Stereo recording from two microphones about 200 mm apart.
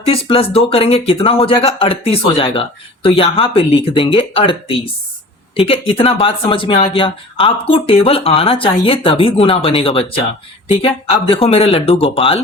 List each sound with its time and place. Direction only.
0.0 s speech: 30° left (ahead or behind)